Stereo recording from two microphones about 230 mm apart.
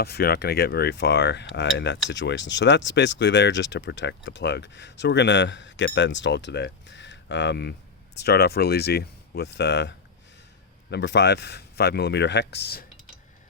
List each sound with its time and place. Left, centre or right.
0.0 s speech: left